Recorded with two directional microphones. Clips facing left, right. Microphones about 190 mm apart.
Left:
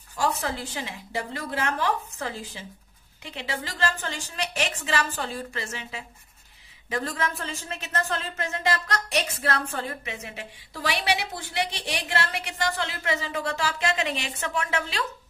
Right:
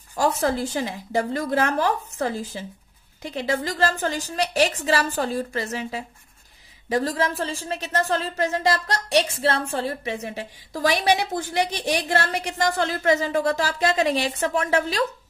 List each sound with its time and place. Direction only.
0.1 s speech: 40° right (ahead or behind)